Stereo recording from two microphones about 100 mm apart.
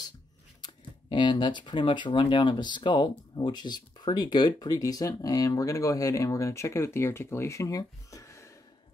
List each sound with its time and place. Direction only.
1.0 s speech: 50° left (ahead or behind); by 8.5 s 30° left (ahead or behind)